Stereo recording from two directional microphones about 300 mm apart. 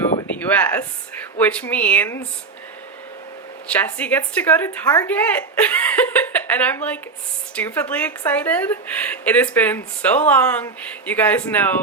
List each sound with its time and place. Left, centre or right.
0.2 s speech: centre
3.7 s a woman's voice: centre